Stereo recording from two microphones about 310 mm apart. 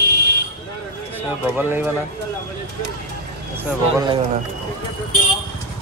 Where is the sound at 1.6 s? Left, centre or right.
Centre.